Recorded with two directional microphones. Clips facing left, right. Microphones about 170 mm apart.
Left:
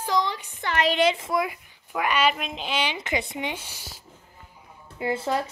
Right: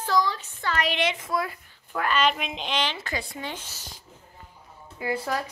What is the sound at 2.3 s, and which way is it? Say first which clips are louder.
A woman's voice: even; centre (ahead or behind).